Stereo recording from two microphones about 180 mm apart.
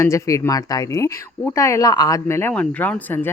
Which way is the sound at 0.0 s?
15° left (ahead or behind).